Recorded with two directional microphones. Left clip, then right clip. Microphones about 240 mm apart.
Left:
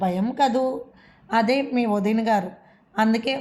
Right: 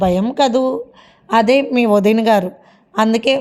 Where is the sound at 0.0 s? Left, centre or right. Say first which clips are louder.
Right 7 dB; right.